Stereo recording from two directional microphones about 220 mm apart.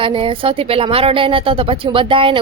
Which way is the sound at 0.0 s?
25° right (ahead or behind).